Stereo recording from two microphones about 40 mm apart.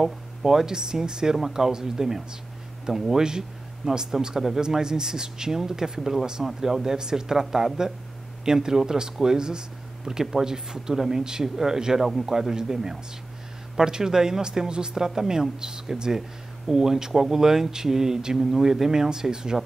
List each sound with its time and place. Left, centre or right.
0.0 s speech: centre